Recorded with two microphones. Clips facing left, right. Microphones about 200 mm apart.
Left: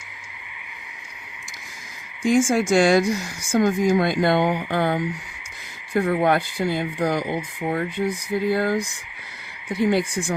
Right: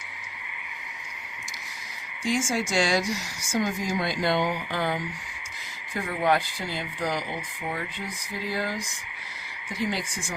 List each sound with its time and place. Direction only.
2.2 s speech: 55° left (ahead or behind)